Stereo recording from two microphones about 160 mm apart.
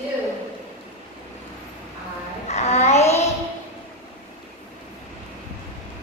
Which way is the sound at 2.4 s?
45° left (ahead or behind).